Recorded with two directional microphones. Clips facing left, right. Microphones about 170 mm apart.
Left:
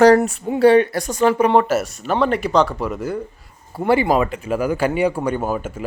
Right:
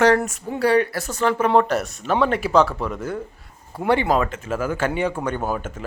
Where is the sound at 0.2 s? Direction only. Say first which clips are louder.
Left 7 dB; 20° left (ahead or behind).